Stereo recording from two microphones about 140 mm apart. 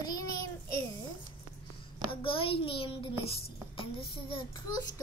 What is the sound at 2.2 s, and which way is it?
A child's voice, 40° left (ahead or behind).